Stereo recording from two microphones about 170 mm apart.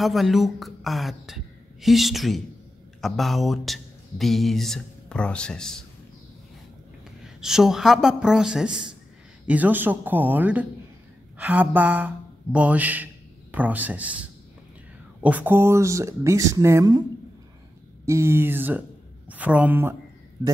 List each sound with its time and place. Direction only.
0.0 s speech: centre (ahead or behind)
7.3 s a man's voice: 5° right (ahead or behind); by 17.0 s 20° right (ahead or behind)
18.0 s a woman's voice: 15° right (ahead or behind)